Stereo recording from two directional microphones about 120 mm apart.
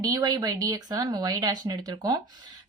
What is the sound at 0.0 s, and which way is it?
Speech, 30° right (ahead or behind).